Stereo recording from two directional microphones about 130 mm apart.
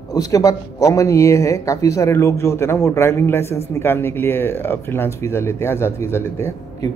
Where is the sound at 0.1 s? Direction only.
30° left (ahead or behind).